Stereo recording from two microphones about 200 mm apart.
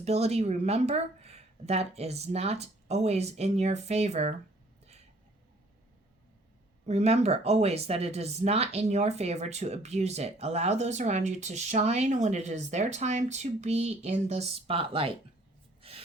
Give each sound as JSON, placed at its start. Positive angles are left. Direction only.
{"t": 0.0, "sound": "speech", "side_deg": -30}
{"t": 6.8, "sound": "speech", "side_deg": -35}